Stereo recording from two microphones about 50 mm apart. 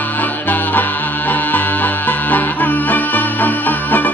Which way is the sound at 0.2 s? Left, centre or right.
Left.